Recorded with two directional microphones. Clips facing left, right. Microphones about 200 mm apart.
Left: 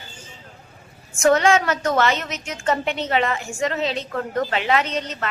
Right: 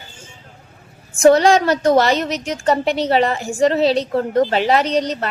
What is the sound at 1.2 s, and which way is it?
A woman's voice, 35° right (ahead or behind).